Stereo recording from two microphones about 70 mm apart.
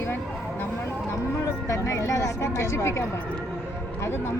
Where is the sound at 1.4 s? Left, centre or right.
Left.